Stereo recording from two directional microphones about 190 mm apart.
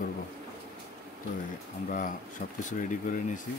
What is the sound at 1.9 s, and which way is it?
Speech, 45° left (ahead or behind).